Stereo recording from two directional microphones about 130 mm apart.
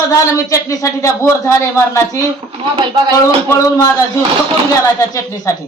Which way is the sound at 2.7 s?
40° right (ahead or behind).